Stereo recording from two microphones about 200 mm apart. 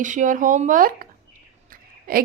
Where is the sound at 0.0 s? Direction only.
40° right (ahead or behind).